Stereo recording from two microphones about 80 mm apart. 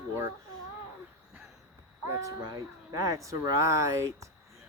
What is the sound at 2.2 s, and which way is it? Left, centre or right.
Speech, right.